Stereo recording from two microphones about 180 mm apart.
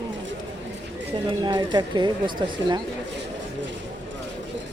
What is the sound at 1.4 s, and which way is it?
Speech, 25° right (ahead or behind).